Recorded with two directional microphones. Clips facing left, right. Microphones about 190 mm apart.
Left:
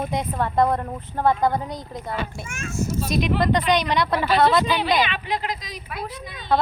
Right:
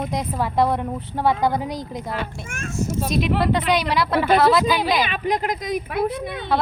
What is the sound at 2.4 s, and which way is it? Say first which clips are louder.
Speech: right 1 dB; 50° right (ahead or behind).